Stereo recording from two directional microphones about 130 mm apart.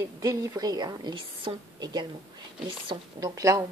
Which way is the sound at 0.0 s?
25° right (ahead or behind).